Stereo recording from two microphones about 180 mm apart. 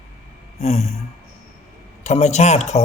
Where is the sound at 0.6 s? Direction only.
35° left (ahead or behind).